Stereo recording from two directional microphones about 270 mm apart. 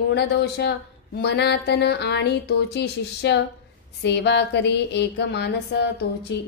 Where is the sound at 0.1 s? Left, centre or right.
Left.